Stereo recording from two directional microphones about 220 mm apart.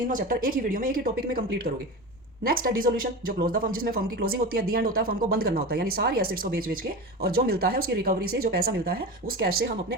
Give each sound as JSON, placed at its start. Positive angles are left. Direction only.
{"t": 0.1, "sound": "speech", "side_deg": -40}